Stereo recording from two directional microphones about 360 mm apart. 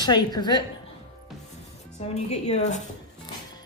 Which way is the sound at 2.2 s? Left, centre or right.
Centre.